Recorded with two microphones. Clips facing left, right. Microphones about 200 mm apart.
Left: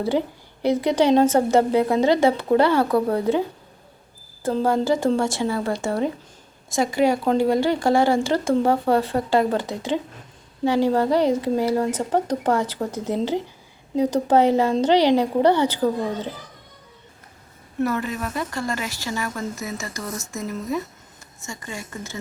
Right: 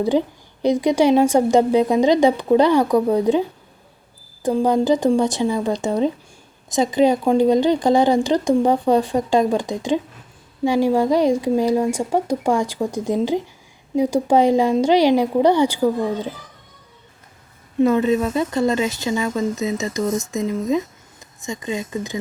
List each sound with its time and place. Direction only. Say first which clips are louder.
0.1 s speech: right 4 dB; 20° right (ahead or behind)
4.4 s speech: right 3 dB; 15° right (ahead or behind)
17.7 s speech: right 8 dB; 20° right (ahead or behind)